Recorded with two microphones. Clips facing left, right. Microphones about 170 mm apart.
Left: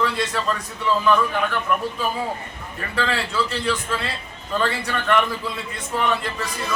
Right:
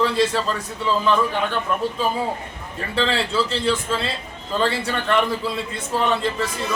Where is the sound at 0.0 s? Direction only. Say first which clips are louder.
Right 4 dB; 30° right (ahead or behind).